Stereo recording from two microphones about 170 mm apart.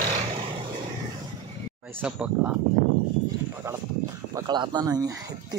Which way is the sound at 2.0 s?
5° right (ahead or behind).